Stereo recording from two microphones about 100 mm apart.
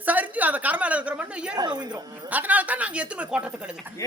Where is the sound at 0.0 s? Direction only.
15° right (ahead or behind).